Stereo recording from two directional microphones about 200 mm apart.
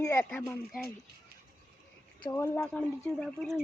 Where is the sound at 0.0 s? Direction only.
15° left (ahead or behind).